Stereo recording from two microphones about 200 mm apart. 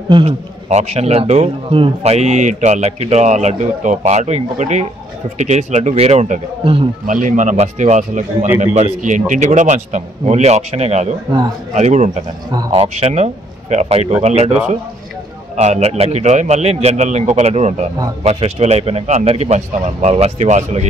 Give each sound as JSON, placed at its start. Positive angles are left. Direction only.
{"t": 0.1, "sound": "a man's voice", "side_deg": -30}
{"t": 7.1, "sound": "a man's voice", "side_deg": -40}
{"t": 12.4, "sound": "a man's voice", "side_deg": -25}